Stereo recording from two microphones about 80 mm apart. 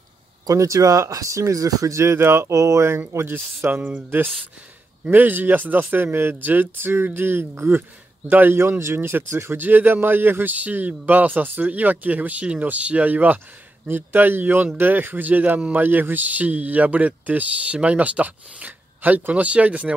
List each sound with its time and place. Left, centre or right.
0.5 s speech: right; by 19.9 s centre